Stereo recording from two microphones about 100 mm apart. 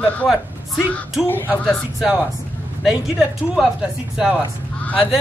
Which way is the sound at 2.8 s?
5° right (ahead or behind).